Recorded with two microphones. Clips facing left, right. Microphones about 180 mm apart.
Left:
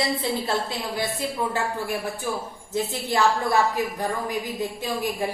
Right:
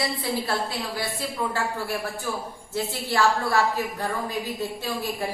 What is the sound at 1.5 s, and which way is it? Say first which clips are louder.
A woman's voice: left 1 dB; 20° left (ahead or behind).